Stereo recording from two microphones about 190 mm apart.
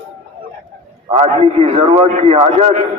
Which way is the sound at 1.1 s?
35° right (ahead or behind).